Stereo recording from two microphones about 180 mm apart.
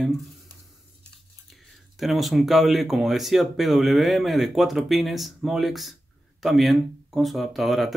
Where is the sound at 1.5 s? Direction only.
Centre (ahead or behind).